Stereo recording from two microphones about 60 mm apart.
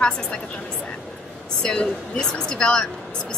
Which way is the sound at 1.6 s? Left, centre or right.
Centre.